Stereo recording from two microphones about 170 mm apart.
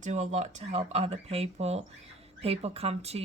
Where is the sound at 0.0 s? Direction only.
45° right (ahead or behind).